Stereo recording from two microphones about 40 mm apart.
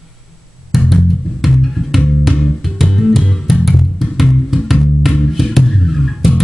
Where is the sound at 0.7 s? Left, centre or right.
Centre.